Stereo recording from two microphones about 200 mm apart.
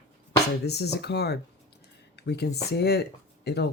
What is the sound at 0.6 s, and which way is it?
Speech, 55° left (ahead or behind).